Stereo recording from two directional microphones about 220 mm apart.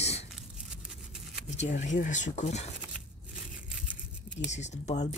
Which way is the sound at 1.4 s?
30° left (ahead or behind).